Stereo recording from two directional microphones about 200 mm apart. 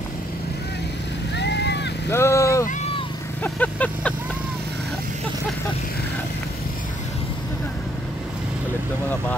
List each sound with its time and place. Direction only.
1.4 s vehicle: 60° left (ahead or behind)
2.0 s vehicle: 15° left (ahead or behind)